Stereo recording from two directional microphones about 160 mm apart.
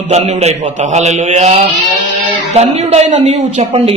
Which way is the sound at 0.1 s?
40° right (ahead or behind).